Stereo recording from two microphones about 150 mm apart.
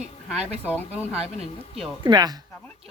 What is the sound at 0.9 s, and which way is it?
Speech, 10° right (ahead or behind).